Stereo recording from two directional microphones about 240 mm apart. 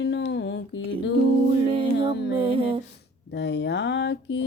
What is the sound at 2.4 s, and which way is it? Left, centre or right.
Music, right.